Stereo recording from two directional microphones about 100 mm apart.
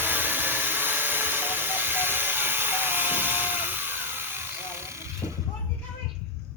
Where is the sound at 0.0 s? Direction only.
20° right (ahead or behind).